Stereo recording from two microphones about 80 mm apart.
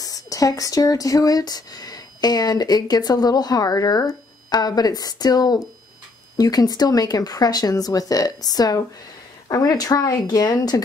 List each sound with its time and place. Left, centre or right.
0.0 s speech: left